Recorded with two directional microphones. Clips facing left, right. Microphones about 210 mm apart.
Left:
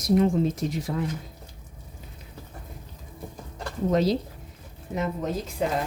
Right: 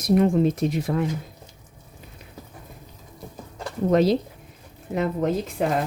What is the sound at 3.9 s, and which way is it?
Speech, 60° right (ahead or behind).